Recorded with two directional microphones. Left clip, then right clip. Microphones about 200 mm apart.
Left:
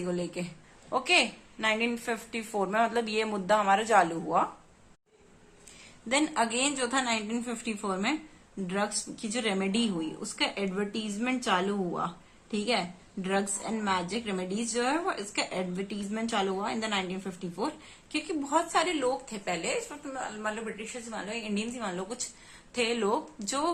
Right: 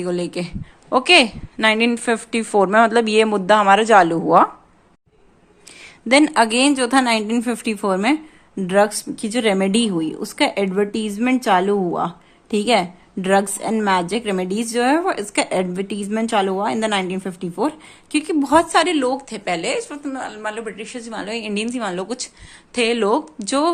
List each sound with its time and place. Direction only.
0.0 s a woman's voice: 45° right (ahead or behind)
6.1 s a woman's voice: 45° right (ahead or behind)